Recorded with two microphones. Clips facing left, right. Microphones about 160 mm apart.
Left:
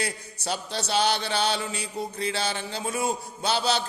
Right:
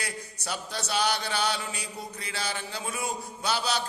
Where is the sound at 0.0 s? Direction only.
25° left (ahead or behind).